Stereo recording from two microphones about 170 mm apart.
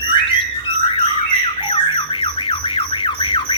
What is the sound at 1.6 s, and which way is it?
Squawk, 30° left (ahead or behind).